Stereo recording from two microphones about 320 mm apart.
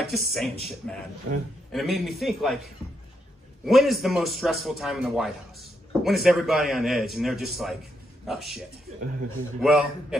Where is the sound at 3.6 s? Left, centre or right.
Centre.